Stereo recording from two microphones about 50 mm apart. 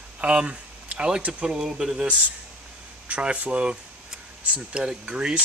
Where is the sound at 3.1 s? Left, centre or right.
Right.